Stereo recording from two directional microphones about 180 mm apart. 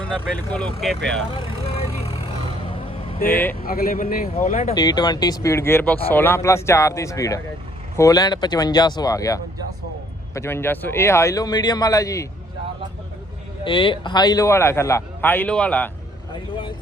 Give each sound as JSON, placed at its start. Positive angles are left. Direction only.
{"t": 0.1, "sound": "speech", "side_deg": 5}
{"t": 1.4, "sound": "vehicle", "side_deg": 30}
{"t": 3.2, "sound": "speech", "side_deg": 10}
{"t": 3.5, "sound": "speech", "side_deg": 55}
{"t": 4.7, "sound": "speech", "side_deg": 20}
{"t": 13.7, "sound": "speech", "side_deg": 30}
{"t": 16.3, "sound": "speech", "side_deg": 25}